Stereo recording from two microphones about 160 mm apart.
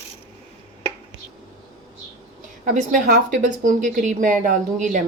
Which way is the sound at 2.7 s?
55° right (ahead or behind).